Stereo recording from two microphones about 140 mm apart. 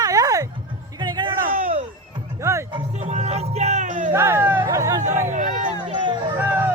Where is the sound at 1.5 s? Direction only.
70° right (ahead or behind).